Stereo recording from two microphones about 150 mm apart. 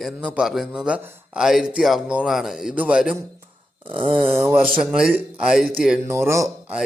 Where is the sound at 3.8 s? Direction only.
35° right (ahead or behind).